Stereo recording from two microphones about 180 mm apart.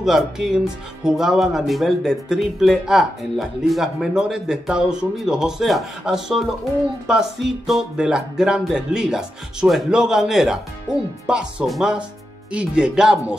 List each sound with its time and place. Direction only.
0.0 s speech: centre (ahead or behind)